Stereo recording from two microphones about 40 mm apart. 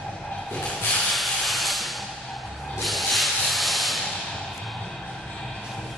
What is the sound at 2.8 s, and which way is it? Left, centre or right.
Rub, centre.